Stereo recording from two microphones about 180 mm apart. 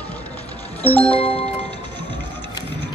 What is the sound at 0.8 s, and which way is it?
Music, 10° left (ahead or behind).